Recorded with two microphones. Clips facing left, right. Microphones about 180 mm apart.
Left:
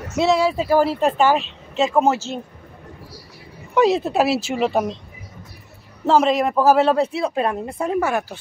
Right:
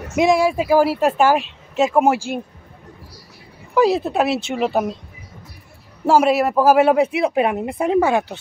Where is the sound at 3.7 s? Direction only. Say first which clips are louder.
Even; centre (ahead or behind).